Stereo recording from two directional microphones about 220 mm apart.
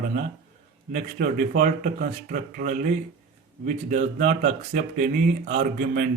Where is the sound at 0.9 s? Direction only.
35° right (ahead or behind).